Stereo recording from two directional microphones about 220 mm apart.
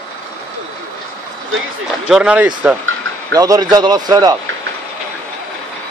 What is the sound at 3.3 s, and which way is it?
A man's voice, 15° right (ahead or behind).